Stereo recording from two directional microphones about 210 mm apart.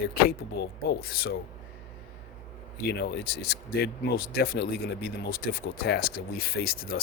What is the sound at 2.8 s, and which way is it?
Speech, 50° left (ahead or behind).